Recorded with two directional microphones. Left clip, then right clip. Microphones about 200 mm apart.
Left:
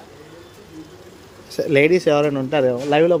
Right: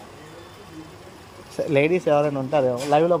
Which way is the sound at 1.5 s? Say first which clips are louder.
Left 5 dB; 15° left (ahead or behind).